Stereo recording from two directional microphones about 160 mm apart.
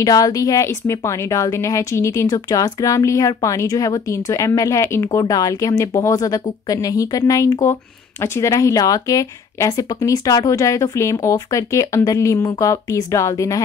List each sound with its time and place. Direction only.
0.0 s speech: 25° left (ahead or behind)